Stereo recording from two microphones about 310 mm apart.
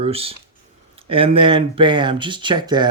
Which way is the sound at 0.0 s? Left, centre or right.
Centre.